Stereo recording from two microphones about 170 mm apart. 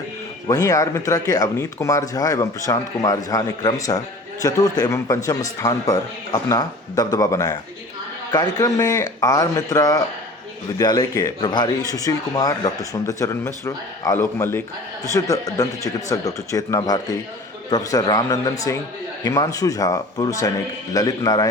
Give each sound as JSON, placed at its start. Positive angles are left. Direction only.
{"t": 0.4, "sound": "speech", "side_deg": 20}